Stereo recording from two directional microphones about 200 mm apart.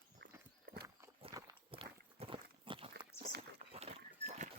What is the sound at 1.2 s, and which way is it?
Walk, 30° right (ahead or behind).